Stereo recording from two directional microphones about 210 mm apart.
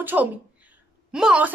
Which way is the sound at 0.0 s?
10° right (ahead or behind).